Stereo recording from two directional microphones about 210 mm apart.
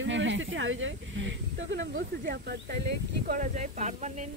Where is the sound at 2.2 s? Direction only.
50° right (ahead or behind).